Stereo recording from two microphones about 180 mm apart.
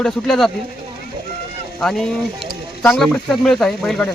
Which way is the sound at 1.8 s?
5° left (ahead or behind).